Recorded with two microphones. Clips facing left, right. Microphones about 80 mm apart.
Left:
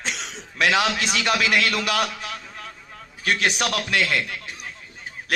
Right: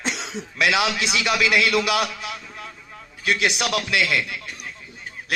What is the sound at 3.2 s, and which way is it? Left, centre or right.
A man's voice, left.